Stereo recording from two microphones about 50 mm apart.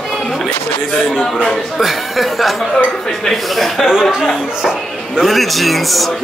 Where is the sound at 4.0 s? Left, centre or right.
Centre.